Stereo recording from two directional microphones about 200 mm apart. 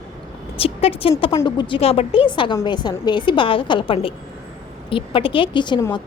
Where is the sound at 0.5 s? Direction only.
30° left (ahead or behind).